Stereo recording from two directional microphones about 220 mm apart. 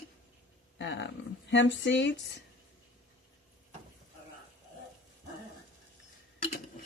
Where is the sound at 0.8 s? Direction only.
55° left (ahead or behind).